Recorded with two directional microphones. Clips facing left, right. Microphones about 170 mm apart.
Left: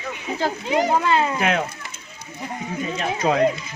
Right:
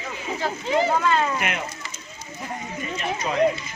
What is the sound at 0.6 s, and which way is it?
Speech, 15° left (ahead or behind).